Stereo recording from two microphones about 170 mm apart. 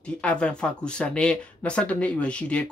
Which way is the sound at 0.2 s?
5° left (ahead or behind).